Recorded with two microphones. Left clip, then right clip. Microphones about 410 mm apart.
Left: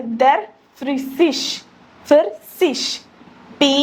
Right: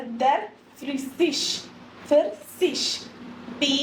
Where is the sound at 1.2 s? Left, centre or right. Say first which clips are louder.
Left 6 dB; left.